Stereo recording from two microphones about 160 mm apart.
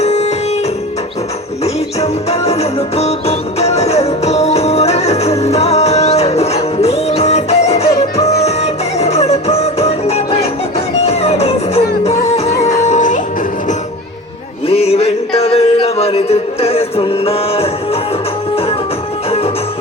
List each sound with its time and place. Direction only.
0.0 s music: 45° left (ahead or behind)
1.6 s music: 40° left (ahead or behind)
14.7 s music: 40° left (ahead or behind)